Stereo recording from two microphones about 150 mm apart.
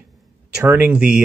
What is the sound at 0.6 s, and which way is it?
Speech, 10° right (ahead or behind).